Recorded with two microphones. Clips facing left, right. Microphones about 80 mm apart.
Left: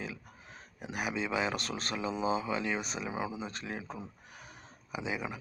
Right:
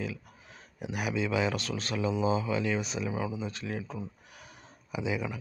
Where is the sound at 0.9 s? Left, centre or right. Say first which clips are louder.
Right 3 dB; left.